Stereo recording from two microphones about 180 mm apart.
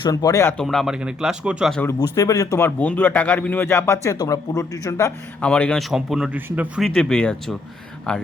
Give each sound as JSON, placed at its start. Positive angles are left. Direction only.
{"t": 0.0, "sound": "speech", "side_deg": 20}
{"t": 0.5, "sound": "speech", "side_deg": 0}
{"t": 1.8, "sound": "a man's voice", "side_deg": 15}
{"t": 5.4, "sound": "speech", "side_deg": 5}